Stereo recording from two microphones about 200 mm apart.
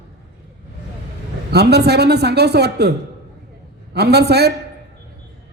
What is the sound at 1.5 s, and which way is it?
Speech, 55° right (ahead or behind).